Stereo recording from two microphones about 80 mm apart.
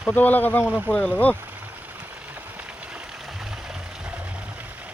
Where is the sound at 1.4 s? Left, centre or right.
Right.